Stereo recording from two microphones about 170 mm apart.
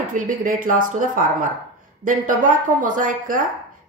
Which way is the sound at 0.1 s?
50° right (ahead or behind).